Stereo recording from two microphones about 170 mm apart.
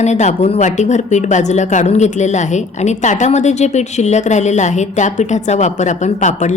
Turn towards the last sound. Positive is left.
turn(degrees=45)  # may be behind; listen again after turning